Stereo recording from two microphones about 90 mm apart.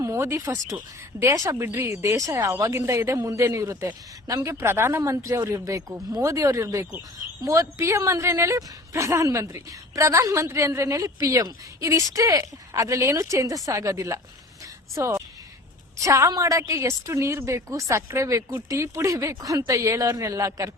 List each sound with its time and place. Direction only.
0.0 s a woman's voice: 30° right (ahead or behind)
14.6 s a sound: 35° right (ahead or behind)
16.0 s a woman's voice: 35° right (ahead or behind)